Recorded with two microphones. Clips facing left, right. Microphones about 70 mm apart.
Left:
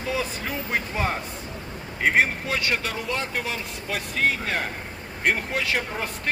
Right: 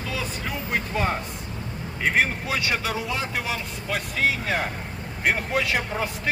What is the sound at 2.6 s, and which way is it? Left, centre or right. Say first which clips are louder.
Speech: even; centre.